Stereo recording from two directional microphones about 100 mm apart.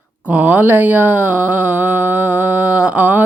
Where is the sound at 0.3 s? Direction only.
15° right (ahead or behind).